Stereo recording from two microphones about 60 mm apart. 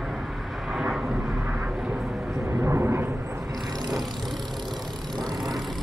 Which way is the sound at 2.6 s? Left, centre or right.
Right.